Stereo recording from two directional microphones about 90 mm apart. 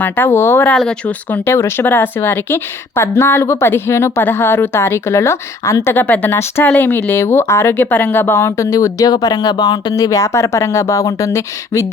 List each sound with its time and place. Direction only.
0.0 s speech: 25° left (ahead or behind)